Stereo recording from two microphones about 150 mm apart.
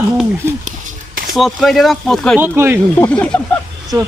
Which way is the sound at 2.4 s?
15° right (ahead or behind).